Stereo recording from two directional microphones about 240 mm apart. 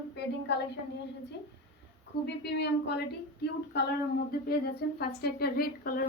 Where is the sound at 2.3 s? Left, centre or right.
Left.